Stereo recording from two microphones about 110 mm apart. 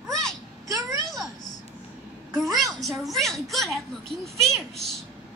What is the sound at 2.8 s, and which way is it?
A woman's voice, centre (ahead or behind).